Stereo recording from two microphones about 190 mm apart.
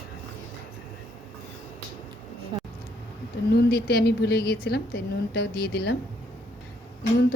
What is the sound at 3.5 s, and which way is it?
A woman's voice, 55° left (ahead or behind).